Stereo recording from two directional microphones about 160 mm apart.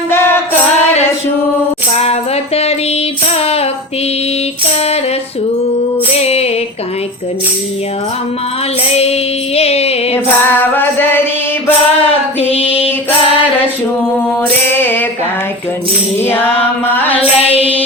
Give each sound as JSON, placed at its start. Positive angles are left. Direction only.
{"t": 0.1, "sound": "music", "side_deg": 15}
{"t": 2.0, "sound": "music", "side_deg": 40}
{"t": 6.1, "sound": "music", "side_deg": 40}
{"t": 8.9, "sound": "music", "side_deg": 40}
{"t": 10.6, "sound": "music", "side_deg": 15}
{"t": 12.4, "sound": "female singing", "side_deg": 35}
{"t": 14.7, "sound": "music", "side_deg": 15}
{"t": 16.2, "sound": "music", "side_deg": 15}
{"t": 16.9, "sound": "mantra", "side_deg": 10}
{"t": 17.4, "sound": "mantra", "side_deg": 35}